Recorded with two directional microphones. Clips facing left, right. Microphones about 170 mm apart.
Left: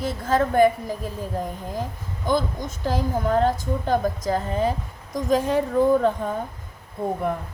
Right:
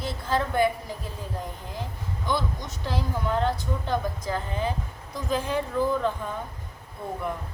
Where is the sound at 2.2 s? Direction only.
50° left (ahead or behind).